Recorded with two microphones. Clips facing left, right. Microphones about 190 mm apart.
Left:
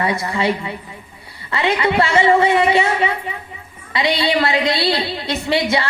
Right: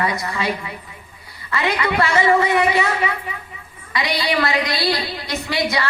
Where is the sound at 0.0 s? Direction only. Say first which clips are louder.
Left 3 dB; 30° left (ahead or behind).